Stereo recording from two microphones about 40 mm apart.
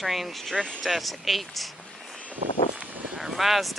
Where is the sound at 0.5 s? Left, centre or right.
Centre.